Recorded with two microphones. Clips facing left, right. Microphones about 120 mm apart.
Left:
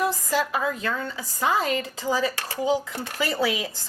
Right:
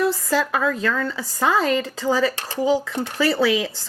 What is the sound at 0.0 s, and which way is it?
Speech, 90° right.